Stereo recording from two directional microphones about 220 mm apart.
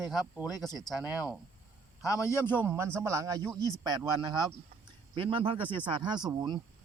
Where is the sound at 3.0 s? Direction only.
15° right (ahead or behind).